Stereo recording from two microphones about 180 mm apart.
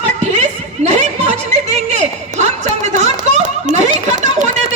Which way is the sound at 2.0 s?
40° right (ahead or behind).